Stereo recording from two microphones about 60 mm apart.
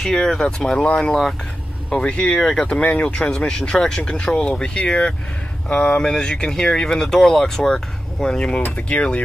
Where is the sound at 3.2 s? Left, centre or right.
Centre.